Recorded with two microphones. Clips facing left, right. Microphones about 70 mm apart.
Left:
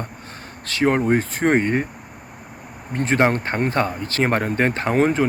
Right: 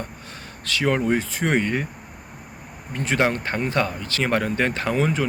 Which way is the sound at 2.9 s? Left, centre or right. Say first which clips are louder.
Left 3 dB; left.